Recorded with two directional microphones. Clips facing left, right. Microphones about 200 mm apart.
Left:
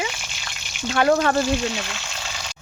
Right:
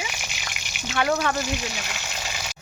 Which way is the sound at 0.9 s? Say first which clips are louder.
Left 5 dB; 40° left (ahead or behind).